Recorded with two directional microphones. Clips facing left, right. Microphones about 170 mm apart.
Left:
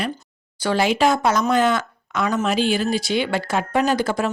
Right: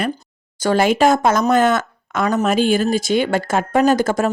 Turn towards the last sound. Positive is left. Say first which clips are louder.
# right 5 dB
turn(degrees=-45)  # may be behind; listen again after turning